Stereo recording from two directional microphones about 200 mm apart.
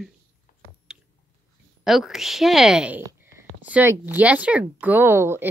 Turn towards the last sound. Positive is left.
turn(degrees=-10)  # may be behind; listen again after turning